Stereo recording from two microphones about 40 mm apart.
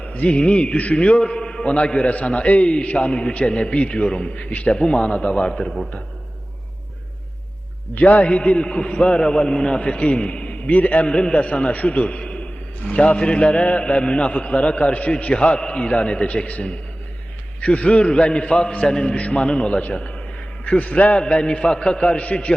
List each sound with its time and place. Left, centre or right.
0.0 s a man's voice: left
7.9 s a man's voice: left
8.4 s a man's voice: left
10.7 s a man's voice: left
20.7 s a man's voice: left
21.6 s a man's voice: centre